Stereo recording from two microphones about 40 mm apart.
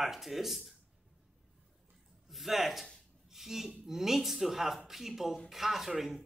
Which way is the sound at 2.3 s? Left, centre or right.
Centre.